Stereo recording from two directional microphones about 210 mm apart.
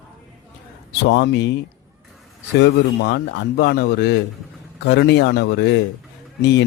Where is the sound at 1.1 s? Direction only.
55° left (ahead or behind).